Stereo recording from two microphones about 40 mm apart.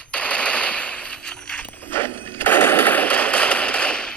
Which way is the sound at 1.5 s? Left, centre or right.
Left.